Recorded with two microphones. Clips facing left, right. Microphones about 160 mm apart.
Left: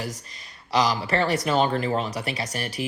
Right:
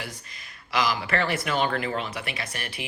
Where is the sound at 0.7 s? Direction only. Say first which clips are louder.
Left 3 dB; 35° left (ahead or behind).